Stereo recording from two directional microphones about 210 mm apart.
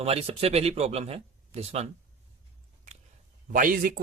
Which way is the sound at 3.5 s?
40° right (ahead or behind).